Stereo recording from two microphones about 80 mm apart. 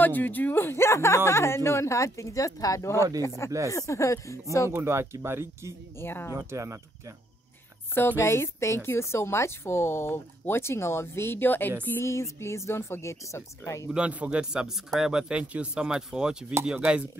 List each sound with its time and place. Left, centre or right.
0.0 s speech: left
4.6 s speech: right
5.9 s speech: left
6.3 s speech: right
7.9 s speech: left
12.0 s speech: left
13.8 s speech: centre